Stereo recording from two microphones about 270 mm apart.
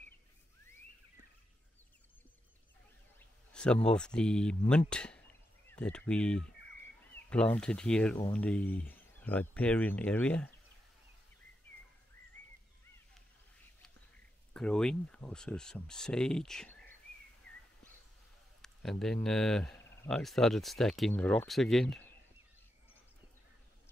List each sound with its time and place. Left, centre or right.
3.5 s speech: centre
14.5 s speech: centre
18.6 s speech: centre